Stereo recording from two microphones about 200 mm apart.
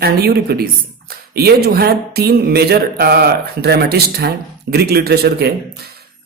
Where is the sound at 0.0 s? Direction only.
50° right (ahead or behind).